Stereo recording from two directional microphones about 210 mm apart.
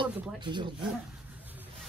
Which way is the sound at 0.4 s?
20° right (ahead or behind).